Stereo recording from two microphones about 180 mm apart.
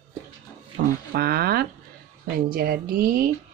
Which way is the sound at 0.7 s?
60° right (ahead or behind).